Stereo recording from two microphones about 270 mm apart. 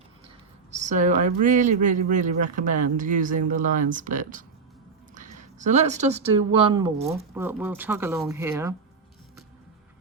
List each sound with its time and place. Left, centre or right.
0.7 s a woman's voice: right; by 8.7 s centre